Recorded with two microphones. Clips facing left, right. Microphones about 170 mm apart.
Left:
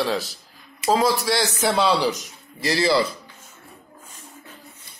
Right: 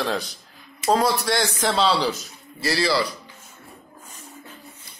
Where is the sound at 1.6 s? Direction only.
10° left (ahead or behind).